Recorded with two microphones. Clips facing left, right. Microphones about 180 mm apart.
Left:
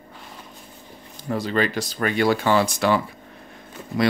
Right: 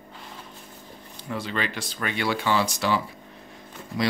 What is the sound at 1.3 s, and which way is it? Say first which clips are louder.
Speech: left 7 dB; 40° left (ahead or behind).